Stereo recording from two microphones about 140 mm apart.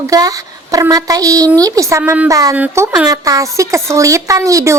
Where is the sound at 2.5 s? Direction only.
10° right (ahead or behind).